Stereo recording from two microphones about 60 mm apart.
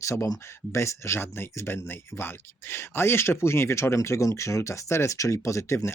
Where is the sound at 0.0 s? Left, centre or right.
Left.